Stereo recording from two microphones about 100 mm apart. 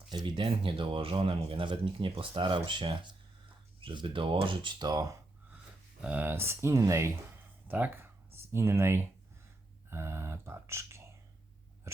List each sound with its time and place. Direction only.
0.1 s speech: 50° right (ahead or behind)
6.0 s speech: 15° right (ahead or behind); by 7.1 s 30° right (ahead or behind)
8.5 s speech: 25° right (ahead or behind)